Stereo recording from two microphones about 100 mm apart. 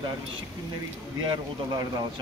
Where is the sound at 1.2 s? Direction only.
45° right (ahead or behind).